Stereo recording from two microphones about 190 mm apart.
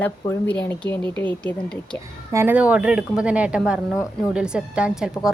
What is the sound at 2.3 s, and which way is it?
A woman's voice, 10° right (ahead or behind).